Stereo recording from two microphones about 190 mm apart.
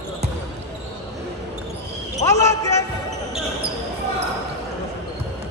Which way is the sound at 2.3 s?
15° left (ahead or behind).